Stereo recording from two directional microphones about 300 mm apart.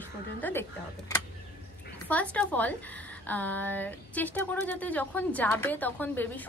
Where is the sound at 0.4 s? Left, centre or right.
Centre.